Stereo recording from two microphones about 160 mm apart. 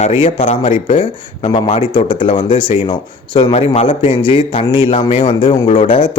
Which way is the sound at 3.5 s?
40° left (ahead or behind).